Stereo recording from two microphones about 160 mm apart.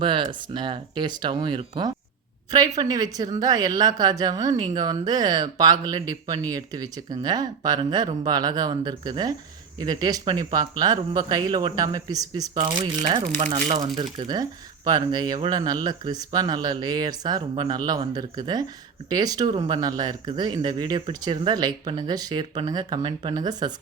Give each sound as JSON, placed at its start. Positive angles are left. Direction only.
{"t": 0.0, "sound": "speech", "side_deg": -30}